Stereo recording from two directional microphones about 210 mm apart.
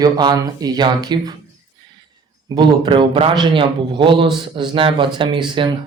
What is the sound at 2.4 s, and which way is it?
Speech, 20° right (ahead or behind).